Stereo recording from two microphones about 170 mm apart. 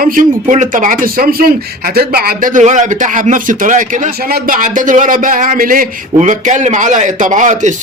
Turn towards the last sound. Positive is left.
turn(degrees=-45)  # may be behind; listen again after turning